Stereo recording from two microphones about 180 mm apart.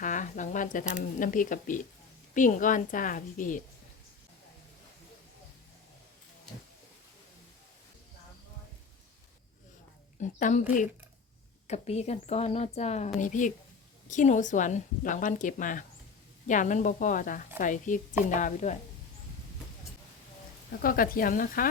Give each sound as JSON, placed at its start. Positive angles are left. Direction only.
{"t": 0.0, "sound": "speech", "side_deg": 45}
{"t": 10.2, "sound": "speech", "side_deg": 45}
{"t": 20.8, "sound": "speech", "side_deg": 55}